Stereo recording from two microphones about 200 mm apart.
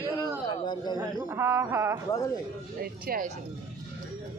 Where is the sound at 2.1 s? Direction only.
15° left (ahead or behind).